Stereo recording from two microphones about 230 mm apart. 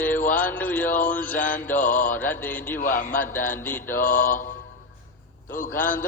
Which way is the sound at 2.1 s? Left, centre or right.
Centre.